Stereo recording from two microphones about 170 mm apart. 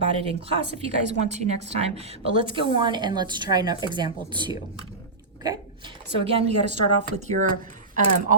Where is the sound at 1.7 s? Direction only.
35° right (ahead or behind).